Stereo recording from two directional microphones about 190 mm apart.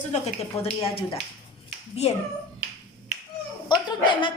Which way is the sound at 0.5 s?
30° left (ahead or behind).